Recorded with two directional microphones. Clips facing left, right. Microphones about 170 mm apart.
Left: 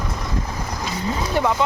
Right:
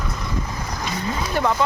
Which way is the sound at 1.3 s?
15° left (ahead or behind).